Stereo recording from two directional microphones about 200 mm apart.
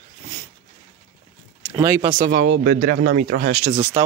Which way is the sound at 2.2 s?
45° right (ahead or behind).